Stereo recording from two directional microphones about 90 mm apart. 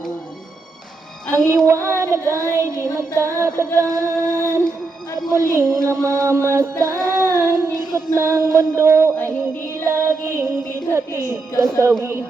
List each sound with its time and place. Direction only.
1.5 s child singing: 35° right (ahead or behind)
5.3 s music: 30° right (ahead or behind)
8.5 s child singing: 30° right (ahead or behind)
9.6 s music: 30° right (ahead or behind)
11.2 s child singing: 35° right (ahead or behind)